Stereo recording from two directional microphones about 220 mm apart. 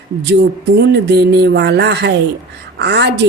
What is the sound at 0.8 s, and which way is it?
Speech, 50° right (ahead or behind).